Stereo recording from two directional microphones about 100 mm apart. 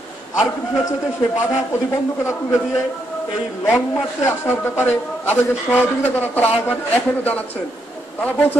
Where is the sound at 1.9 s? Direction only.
30° left (ahead or behind).